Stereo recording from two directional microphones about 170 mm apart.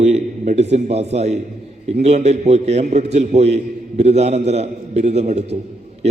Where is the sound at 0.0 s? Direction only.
40° right (ahead or behind).